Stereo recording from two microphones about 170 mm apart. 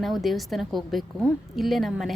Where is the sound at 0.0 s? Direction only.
Centre (ahead or behind).